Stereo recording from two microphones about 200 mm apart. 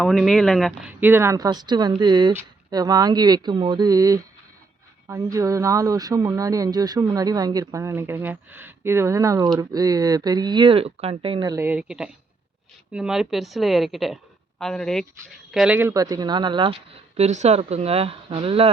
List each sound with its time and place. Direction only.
0.0 s speech: centre (ahead or behind); by 18.7 s 30° right (ahead or behind)